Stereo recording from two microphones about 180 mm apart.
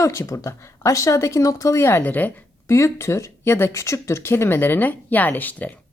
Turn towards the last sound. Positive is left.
turn(degrees=10)  # may be behind; listen again after turning